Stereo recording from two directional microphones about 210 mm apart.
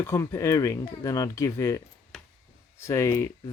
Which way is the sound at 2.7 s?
15° left (ahead or behind).